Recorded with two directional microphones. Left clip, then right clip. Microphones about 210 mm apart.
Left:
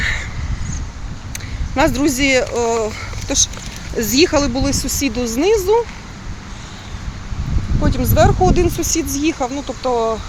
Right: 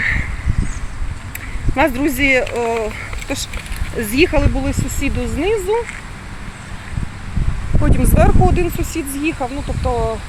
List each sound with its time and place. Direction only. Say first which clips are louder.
0.0 s a sound: right 2 dB; 10° left (ahead or behind)
1.7 s speech: even; 10° left (ahead or behind); by 5.7 s 25° left (ahead or behind)
7.9 s speech: left 2 dB; 5° left (ahead or behind)
8.5 s speech: left 3 dB; 15° left (ahead or behind)